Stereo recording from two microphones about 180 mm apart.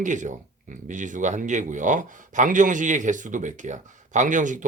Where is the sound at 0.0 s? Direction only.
45° right (ahead or behind).